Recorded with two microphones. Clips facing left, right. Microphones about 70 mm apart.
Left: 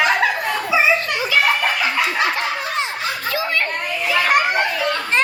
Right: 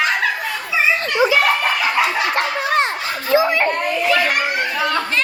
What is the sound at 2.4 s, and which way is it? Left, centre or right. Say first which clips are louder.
Laughter: right 5 dB; right.